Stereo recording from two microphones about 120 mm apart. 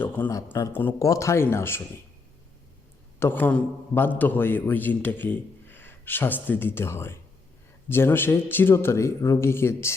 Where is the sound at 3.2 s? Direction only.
15° left (ahead or behind).